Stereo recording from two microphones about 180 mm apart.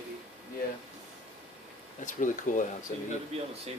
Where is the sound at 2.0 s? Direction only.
45° left (ahead or behind).